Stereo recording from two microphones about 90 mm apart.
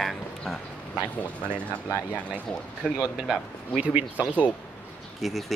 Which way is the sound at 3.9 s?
15° right (ahead or behind).